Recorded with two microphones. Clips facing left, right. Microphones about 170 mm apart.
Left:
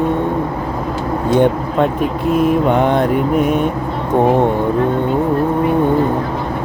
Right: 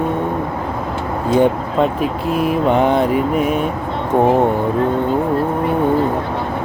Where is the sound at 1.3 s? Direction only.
5° right (ahead or behind).